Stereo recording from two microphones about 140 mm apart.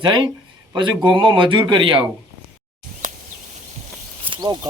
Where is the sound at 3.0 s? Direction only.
65° right (ahead or behind).